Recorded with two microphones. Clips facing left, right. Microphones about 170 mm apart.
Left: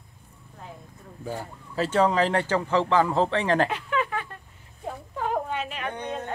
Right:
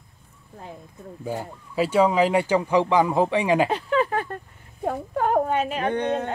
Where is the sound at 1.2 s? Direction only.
15° right (ahead or behind).